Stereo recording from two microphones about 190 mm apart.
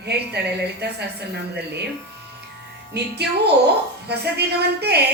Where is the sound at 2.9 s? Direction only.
60° right (ahead or behind).